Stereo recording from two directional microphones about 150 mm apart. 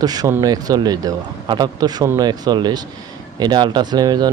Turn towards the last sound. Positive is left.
turn(degrees=-30)  # may be behind; listen again after turning